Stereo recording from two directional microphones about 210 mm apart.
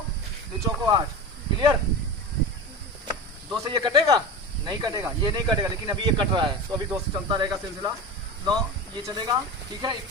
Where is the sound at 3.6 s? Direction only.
20° right (ahead or behind).